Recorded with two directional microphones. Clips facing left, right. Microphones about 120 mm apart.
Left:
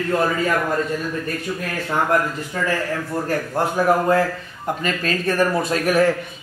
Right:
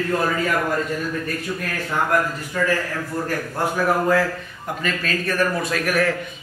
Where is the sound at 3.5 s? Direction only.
25° left (ahead or behind).